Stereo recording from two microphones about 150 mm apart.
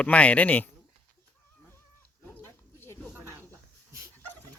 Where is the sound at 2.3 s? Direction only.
15° left (ahead or behind).